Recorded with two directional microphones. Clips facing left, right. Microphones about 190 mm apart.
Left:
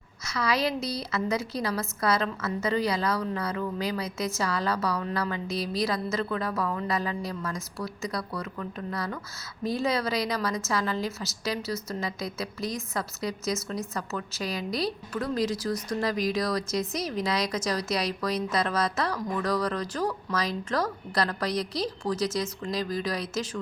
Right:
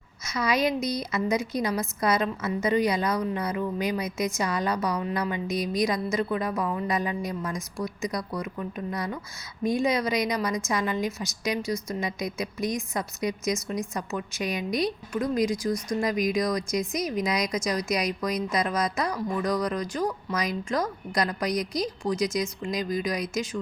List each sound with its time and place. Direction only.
0.3 s a woman's voice: 20° right (ahead or behind)